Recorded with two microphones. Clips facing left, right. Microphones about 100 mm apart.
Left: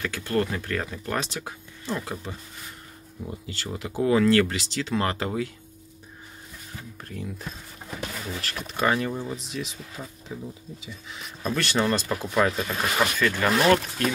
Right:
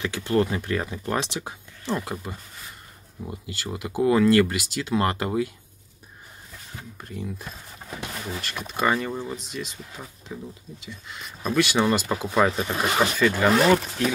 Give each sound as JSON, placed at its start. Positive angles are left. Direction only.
{"t": 0.0, "sound": "speech", "side_deg": -15}
{"t": 7.0, "sound": "speech", "side_deg": -5}
{"t": 12.4, "sound": "speech", "side_deg": -25}
{"t": 13.2, "sound": "speech", "side_deg": -10}